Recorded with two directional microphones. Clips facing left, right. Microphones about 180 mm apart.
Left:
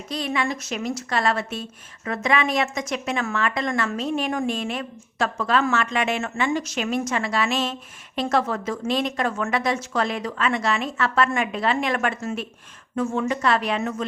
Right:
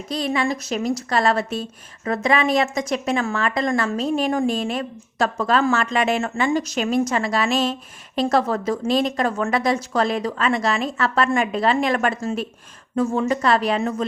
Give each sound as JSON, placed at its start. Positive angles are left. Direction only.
{"t": 0.1, "sound": "speech", "side_deg": -35}